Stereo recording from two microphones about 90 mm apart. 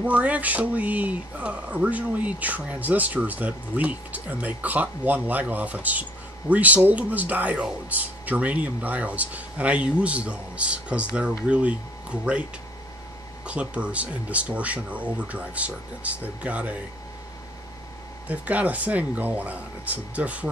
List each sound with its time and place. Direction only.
0.0 s speech: 15° right (ahead or behind)
13.5 s speech: 15° right (ahead or behind)
18.3 s speech: 15° right (ahead or behind)